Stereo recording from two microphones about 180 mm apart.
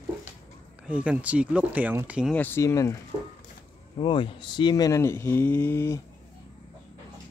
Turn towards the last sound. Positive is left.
turn(degrees=15)  # may be behind; listen again after turning